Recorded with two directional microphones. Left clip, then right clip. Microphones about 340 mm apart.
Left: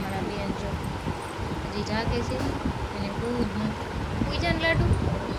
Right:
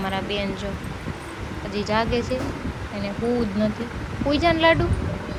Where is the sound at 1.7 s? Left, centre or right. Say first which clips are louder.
Right 8 dB; centre.